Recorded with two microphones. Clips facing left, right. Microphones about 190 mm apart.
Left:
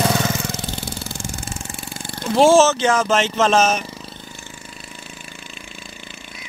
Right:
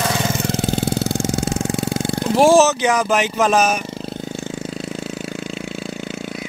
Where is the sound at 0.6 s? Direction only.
65° right (ahead or behind); by 1.8 s 90° right.